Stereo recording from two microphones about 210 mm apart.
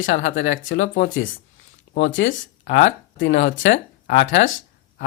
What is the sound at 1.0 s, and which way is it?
Speech, 65° left (ahead or behind).